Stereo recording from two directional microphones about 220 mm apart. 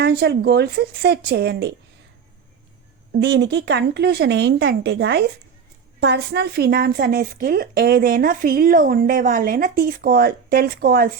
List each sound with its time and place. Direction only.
0.0 s a woman's voice: 50° right (ahead or behind)
3.2 s a woman's voice: 50° right (ahead or behind)